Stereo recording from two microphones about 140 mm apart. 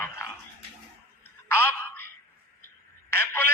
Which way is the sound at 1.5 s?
15° left (ahead or behind).